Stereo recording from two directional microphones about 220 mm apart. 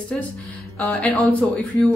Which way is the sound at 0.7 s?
5° left (ahead or behind).